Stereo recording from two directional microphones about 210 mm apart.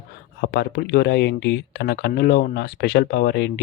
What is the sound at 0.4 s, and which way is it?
Speech, 50° left (ahead or behind).